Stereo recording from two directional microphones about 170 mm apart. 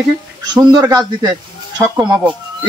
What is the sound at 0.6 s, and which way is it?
Speech, 20° right (ahead or behind).